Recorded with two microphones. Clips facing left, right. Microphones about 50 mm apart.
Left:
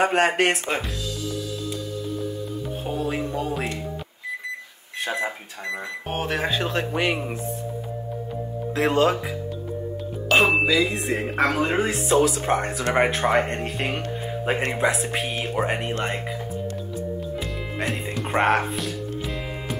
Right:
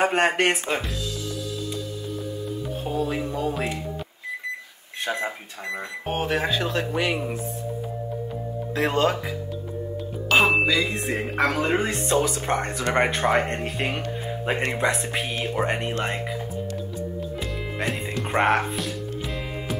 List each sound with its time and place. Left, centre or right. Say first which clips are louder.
0.0 s speech: left 1 dB; centre
2.8 s music: even; centre
3.3 s speech: even; centre
5.2 s speech: left 1 dB; centre
6.5 s speech: even; left
8.8 s speech: left 2 dB; centre
10.3 s speech: left 1 dB; centre
17.7 s speech: even; centre